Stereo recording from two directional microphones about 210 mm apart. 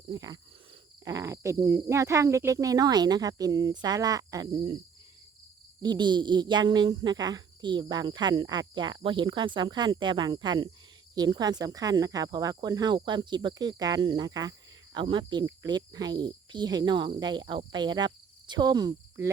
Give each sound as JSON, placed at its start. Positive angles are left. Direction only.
{"t": 0.1, "sound": "speech", "side_deg": -20}
{"t": 5.8, "sound": "speech", "side_deg": -20}
{"t": 17.6, "sound": "cricket", "side_deg": -20}